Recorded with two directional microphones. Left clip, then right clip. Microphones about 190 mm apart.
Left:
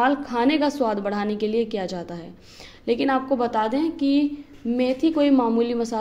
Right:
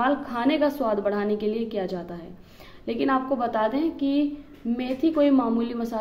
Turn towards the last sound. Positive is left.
turn(degrees=30)  # may be behind; listen again after turning